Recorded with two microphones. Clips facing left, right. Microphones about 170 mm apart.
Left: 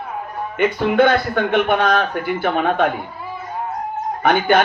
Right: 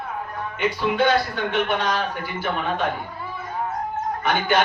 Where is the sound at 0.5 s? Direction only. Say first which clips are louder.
Left 7 dB; 55° left (ahead or behind).